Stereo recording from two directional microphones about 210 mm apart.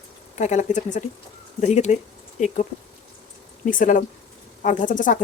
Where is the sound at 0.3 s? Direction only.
35° left (ahead or behind).